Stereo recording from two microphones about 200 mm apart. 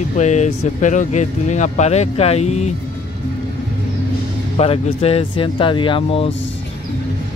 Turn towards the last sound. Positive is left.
turn(degrees=25)  # may be behind; listen again after turning